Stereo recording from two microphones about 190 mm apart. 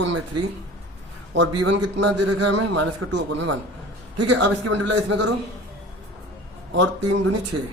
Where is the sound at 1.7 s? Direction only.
70° right (ahead or behind).